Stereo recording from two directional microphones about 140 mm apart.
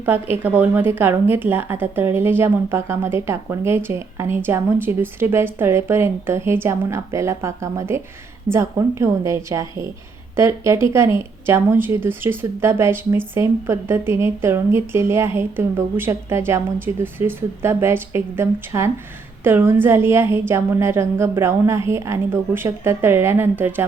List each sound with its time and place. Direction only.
0.0 s a woman's voice: 15° right (ahead or behind)